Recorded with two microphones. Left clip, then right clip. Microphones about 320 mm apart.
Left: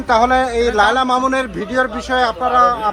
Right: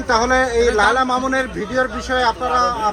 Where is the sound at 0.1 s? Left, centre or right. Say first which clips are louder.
Left 2 dB; left.